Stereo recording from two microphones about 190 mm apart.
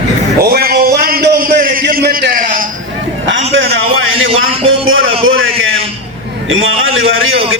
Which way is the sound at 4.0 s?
90° right.